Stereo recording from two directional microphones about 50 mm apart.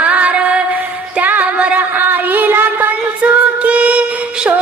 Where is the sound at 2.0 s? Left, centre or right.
Right.